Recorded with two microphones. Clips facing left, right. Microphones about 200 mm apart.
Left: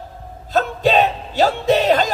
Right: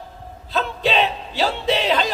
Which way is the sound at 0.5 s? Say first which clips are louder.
Left 5 dB; 45° left (ahead or behind).